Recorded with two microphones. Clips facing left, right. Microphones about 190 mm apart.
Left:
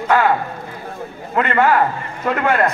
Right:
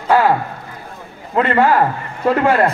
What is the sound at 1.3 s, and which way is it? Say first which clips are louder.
A man's voice: right 2 dB; 30° right (ahead or behind).